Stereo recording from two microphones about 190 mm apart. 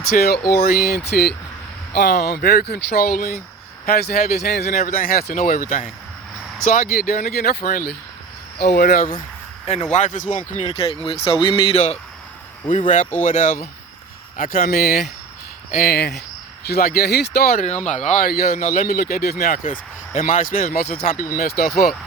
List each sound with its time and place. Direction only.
0.1 s a man's voice: 55° left (ahead or behind)
4.7 s speech: 45° left (ahead or behind)
10.7 s speech: 30° left (ahead or behind)
12.6 s a man's voice: 40° left (ahead or behind)